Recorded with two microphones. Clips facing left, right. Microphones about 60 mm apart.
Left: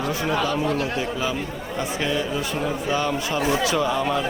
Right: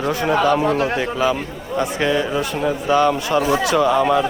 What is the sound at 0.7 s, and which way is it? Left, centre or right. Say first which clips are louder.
Speech: right 6 dB; right.